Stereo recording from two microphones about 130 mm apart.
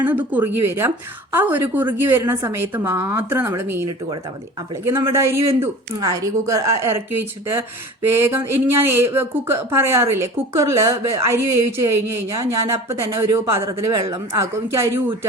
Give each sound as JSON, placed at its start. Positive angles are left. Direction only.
{"t": 0.0, "sound": "speech", "side_deg": -15}
{"t": 8.0, "sound": "speech", "side_deg": -20}